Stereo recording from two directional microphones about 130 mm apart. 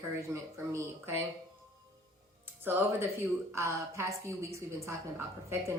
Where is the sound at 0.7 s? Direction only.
20° right (ahead or behind).